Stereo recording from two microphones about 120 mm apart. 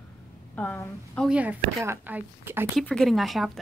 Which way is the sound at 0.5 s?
15° left (ahead or behind).